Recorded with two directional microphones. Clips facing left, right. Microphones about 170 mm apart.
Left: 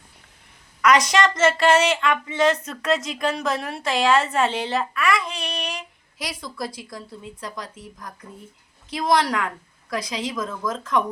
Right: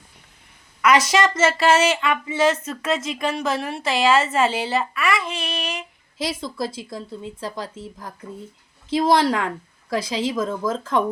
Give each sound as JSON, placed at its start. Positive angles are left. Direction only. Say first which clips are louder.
{"t": 0.8, "sound": "a woman's voice", "louder": "right 1 dB", "side_deg": -5}
{"t": 6.1, "sound": "speech", "louder": "right 5 dB", "side_deg": -25}